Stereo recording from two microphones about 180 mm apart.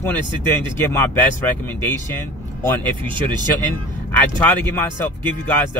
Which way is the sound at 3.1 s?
25° right (ahead or behind).